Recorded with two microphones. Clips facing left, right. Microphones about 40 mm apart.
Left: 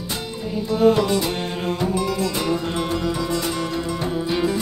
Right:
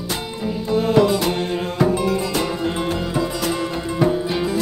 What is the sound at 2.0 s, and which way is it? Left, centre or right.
Music, centre.